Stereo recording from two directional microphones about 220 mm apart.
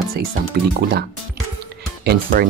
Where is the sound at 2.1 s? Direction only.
45° right (ahead or behind).